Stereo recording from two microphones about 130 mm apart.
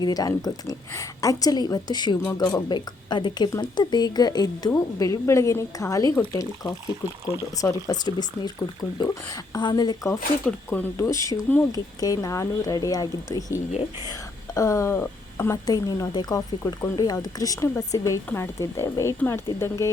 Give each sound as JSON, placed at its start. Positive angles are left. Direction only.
{"t": 0.0, "sound": "speech", "side_deg": 30}
{"t": 10.7, "sound": "speech", "side_deg": 20}